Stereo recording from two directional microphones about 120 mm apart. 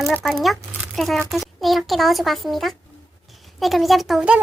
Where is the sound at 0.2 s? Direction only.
Centre (ahead or behind).